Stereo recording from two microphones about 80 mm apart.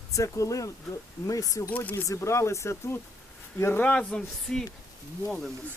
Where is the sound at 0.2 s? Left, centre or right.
Left.